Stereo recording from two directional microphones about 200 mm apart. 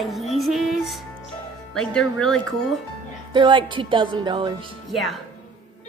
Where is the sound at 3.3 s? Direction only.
25° right (ahead or behind).